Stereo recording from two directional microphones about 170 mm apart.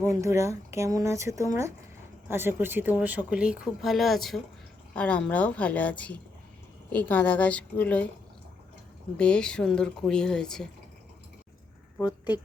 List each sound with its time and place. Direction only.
0.0 s a woman's voice: 15° right (ahead or behind); by 8.1 s 10° left (ahead or behind)
9.1 s speech: 5° left (ahead or behind)
11.9 s speech: 25° left (ahead or behind)